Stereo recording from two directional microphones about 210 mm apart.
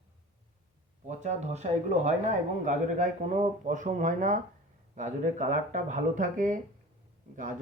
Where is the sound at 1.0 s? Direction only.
35° right (ahead or behind).